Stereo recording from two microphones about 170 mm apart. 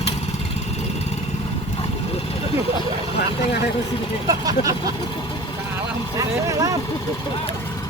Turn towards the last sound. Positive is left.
turn(degrees=-20)  # may be behind; listen again after turning